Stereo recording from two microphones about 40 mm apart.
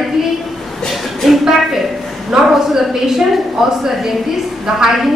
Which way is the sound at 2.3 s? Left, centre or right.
Centre.